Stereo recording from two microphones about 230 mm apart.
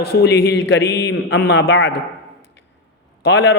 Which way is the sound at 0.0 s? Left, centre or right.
Left.